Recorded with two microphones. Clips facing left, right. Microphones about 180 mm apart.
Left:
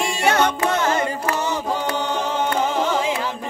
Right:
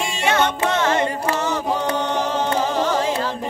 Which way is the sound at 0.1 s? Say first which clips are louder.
Even; 25° right (ahead or behind).